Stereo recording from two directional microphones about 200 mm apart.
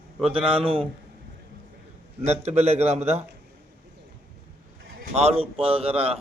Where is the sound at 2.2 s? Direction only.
35° right (ahead or behind).